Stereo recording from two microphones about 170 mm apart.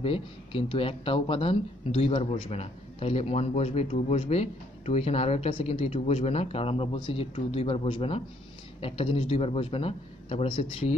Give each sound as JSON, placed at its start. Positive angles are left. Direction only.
{"t": 0.0, "sound": "speech", "side_deg": 35}